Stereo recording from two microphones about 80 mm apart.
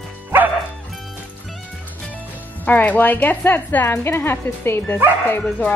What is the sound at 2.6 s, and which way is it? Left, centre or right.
A woman's voice, left.